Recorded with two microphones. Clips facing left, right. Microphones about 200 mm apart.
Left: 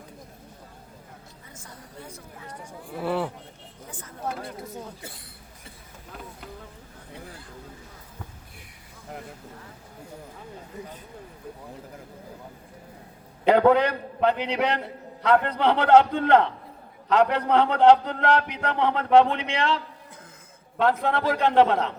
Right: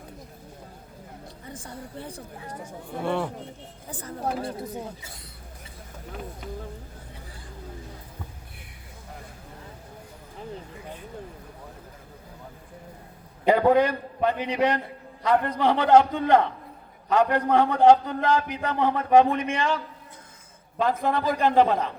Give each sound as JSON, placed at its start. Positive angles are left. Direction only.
{"t": 1.5, "sound": "a woman's voice", "side_deg": -30}
{"t": 3.0, "sound": "speech", "side_deg": 5}
{"t": 3.8, "sound": "a woman's voice", "side_deg": -35}
{"t": 13.4, "sound": "a man's voice", "side_deg": 70}